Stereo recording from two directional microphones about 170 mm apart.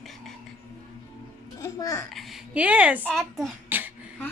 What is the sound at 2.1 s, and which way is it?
Speech, centre (ahead or behind).